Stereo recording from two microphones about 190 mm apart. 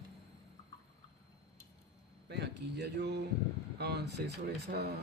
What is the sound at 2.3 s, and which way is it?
Speech, 60° right (ahead or behind).